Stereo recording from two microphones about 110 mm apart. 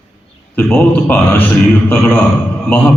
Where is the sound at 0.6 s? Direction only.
15° left (ahead or behind).